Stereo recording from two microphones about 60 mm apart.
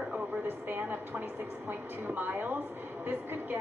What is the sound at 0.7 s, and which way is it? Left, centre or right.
Speech, right.